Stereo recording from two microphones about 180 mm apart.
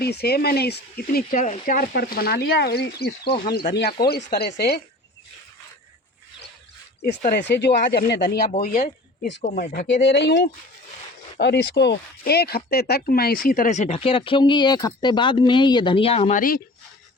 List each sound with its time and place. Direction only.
0.0 s speech: 60° left (ahead or behind)
3.5 s speech: 65° left (ahead or behind)
7.3 s speech: 70° left (ahead or behind)
8.4 s speech: 45° left (ahead or behind)
10.0 s speech: 75° left (ahead or behind); by 16.4 s 35° left (ahead or behind)